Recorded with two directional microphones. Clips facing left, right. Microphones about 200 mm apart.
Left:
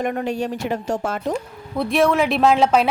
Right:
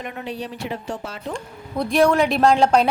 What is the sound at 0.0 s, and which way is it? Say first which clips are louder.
Speech: left 7 dB; 50° left (ahead or behind).